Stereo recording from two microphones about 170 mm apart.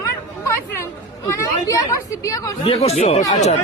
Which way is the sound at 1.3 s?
20° left (ahead or behind).